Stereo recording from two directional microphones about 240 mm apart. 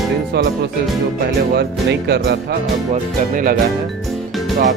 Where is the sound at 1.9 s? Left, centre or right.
Right.